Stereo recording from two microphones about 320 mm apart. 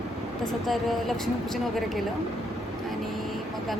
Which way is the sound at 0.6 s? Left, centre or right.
Centre.